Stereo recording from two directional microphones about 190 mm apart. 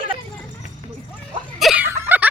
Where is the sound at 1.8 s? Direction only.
15° right (ahead or behind).